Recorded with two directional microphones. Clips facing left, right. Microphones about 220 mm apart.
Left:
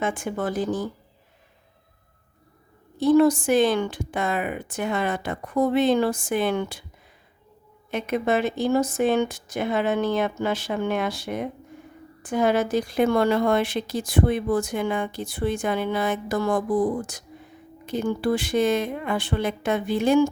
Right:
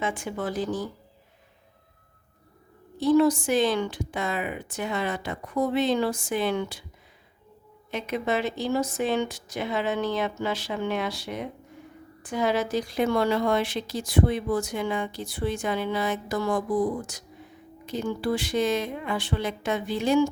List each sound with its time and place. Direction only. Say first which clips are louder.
0.0 s speech: left 3 dB; 50° left (ahead or behind)
3.0 s speech: left 3 dB; 50° left (ahead or behind)
7.9 s speech: left 4 dB; 50° left (ahead or behind)